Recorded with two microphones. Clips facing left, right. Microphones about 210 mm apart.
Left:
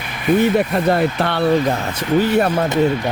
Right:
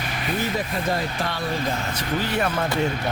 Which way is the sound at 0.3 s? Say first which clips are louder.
Left 12 dB; 65° left (ahead or behind).